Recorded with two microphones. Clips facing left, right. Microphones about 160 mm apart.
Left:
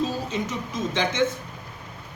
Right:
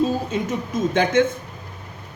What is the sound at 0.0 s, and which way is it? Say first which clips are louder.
A woman's voice: right 5 dB; 50° right (ahead or behind).